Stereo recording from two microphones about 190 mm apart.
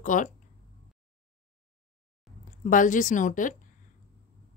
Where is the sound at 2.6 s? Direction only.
45° left (ahead or behind).